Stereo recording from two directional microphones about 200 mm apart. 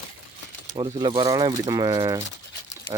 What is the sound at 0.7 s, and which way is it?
Speech, 20° right (ahead or behind).